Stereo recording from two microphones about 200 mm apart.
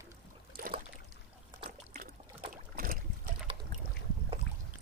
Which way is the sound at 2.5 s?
45° right (ahead or behind).